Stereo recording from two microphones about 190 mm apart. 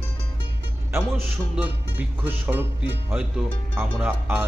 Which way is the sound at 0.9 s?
10° right (ahead or behind).